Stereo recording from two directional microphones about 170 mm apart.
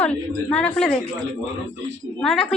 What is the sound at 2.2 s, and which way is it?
Speech, 5° left (ahead or behind).